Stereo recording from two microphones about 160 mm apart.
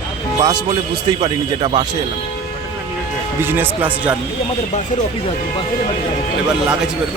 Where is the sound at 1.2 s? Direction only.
30° right (ahead or behind).